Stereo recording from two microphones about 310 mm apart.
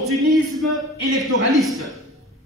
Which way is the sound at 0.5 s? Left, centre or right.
Centre.